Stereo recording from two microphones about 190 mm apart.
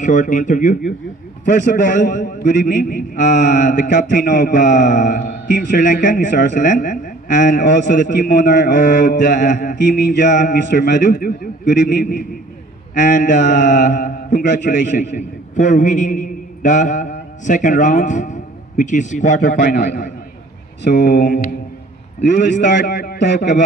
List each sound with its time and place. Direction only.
0.0 s a man's voice: 40° left (ahead or behind)
11.1 s a man's voice: 55° left (ahead or behind)
12.0 s a man's voice: 45° left (ahead or behind)
20.8 s a man's voice: 60° left (ahead or behind)
22.6 s a man's voice: 50° left (ahead or behind)